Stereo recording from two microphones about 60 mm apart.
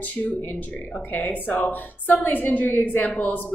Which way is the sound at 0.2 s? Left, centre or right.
Centre.